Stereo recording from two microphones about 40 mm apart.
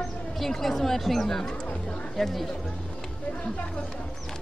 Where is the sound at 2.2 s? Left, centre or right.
Centre.